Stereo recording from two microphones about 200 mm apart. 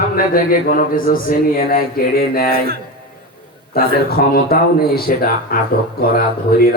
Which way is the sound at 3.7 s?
50° left (ahead or behind).